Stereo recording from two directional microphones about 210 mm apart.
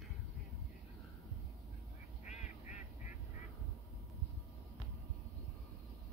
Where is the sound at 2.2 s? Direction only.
35° left (ahead or behind).